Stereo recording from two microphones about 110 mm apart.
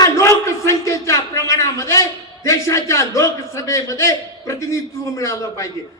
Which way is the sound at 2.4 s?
30° left (ahead or behind).